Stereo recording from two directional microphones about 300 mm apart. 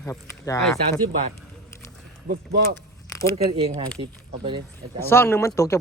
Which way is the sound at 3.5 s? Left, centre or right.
Centre.